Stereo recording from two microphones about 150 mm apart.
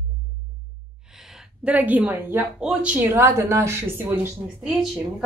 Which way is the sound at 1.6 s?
10° right (ahead or behind).